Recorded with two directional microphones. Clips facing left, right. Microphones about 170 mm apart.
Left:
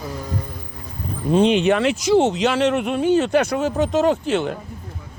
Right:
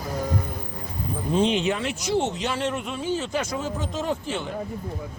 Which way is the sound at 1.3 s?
70° left (ahead or behind).